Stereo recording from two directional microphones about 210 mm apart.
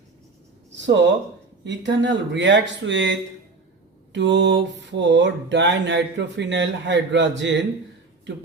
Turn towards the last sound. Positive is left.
turn(degrees=-60)  # may be behind; listen again after turning